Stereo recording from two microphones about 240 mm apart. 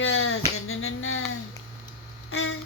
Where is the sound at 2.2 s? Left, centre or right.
Left.